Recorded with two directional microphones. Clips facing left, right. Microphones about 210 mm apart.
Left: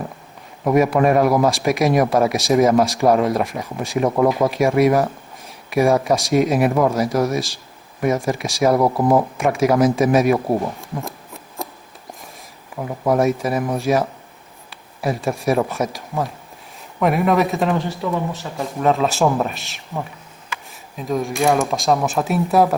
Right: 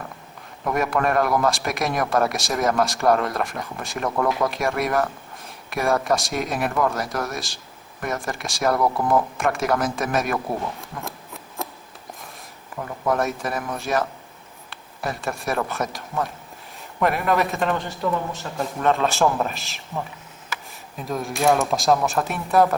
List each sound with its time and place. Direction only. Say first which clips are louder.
0.7 s speech: left 7 dB; centre (ahead or behind)
4.1 s speech: left 4 dB; 20° left (ahead or behind)
4.5 s speech: left 8 dB; centre (ahead or behind)
8.7 s speech: left 4 dB; 25° left (ahead or behind)
9.4 s speech: left 6 dB; centre (ahead or behind)
10.3 s speech: left 7 dB; 25° left (ahead or behind)
11.0 s scissors: left 2 dB; centre (ahead or behind)
12.7 s speech: left 4 dB; 15° left (ahead or behind)
13.1 s speech: left 7 dB; centre (ahead or behind)